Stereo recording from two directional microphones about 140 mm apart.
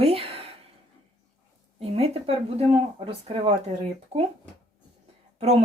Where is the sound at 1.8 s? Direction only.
45° right (ahead or behind).